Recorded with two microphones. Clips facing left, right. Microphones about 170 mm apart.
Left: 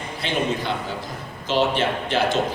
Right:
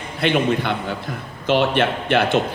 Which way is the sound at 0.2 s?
60° right (ahead or behind).